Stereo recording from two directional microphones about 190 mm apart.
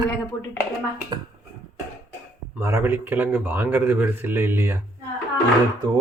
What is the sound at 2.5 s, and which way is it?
Speech, 15° right (ahead or behind).